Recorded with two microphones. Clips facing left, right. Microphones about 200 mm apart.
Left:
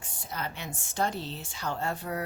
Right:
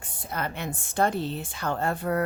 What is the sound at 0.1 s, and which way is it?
A woman's voice, 55° right (ahead or behind).